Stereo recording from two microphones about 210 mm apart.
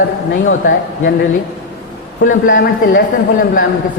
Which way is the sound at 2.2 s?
40° left (ahead or behind).